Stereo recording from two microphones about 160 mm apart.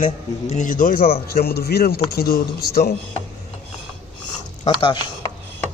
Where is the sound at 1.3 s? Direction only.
75° left (ahead or behind).